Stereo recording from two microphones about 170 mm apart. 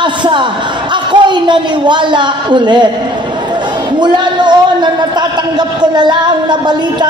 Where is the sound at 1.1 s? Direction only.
25° right (ahead or behind).